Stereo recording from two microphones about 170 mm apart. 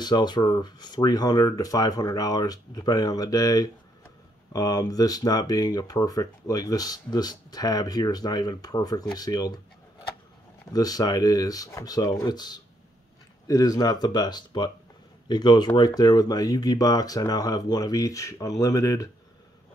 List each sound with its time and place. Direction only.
0.0 s speech: 25° left (ahead or behind)
10.7 s speech: 20° left (ahead or behind)